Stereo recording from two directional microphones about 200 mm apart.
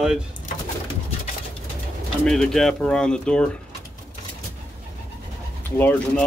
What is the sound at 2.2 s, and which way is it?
Speech, centre (ahead or behind).